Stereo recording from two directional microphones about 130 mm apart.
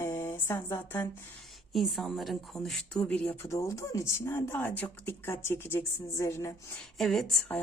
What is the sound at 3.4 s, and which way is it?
A woman's voice, 25° left (ahead or behind).